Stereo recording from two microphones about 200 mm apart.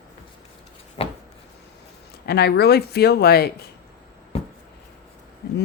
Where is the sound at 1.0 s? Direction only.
30° left (ahead or behind).